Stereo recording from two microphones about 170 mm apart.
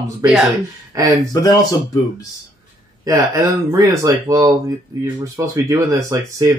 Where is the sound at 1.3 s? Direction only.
20° left (ahead or behind).